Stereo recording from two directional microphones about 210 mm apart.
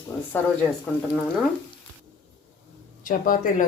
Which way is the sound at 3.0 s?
40° left (ahead or behind).